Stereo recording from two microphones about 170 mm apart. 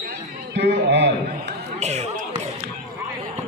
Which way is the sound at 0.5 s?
90° right.